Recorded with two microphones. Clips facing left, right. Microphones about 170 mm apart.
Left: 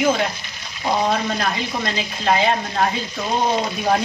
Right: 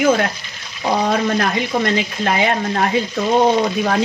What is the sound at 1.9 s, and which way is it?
Speech, 70° right (ahead or behind).